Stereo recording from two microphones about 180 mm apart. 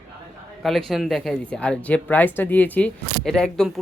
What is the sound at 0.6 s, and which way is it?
Speech, centre (ahead or behind).